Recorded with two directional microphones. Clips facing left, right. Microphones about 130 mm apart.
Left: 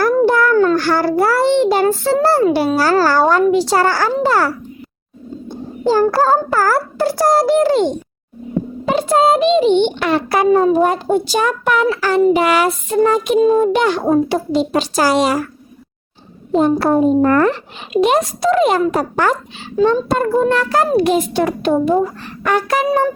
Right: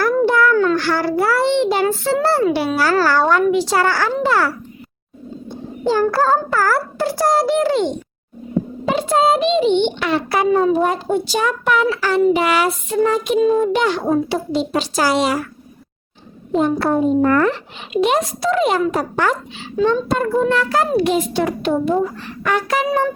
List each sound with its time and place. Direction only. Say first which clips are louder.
0.0 s a child's voice: left 2 dB; 40° left (ahead or behind)
5.8 s a child's voice: left 3 dB; 35° left (ahead or behind)
8.9 s a child's voice: left 2 dB; 45° left (ahead or behind)
16.5 s a child's voice: left 3 dB; 35° left (ahead or behind)